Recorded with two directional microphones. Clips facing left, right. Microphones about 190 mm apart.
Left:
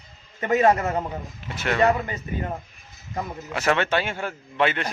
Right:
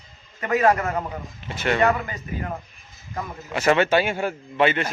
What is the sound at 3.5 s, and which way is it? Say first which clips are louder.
Speech: right 4 dB; centre (ahead or behind).